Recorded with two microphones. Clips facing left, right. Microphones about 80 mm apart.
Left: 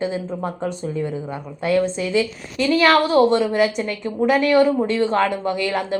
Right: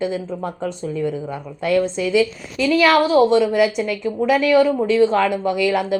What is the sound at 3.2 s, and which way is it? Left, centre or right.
Speech, left.